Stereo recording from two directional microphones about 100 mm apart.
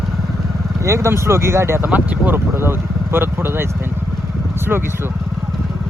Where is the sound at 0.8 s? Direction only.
30° right (ahead or behind).